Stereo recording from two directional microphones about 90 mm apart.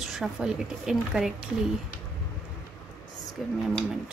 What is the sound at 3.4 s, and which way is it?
Speech, centre (ahead or behind).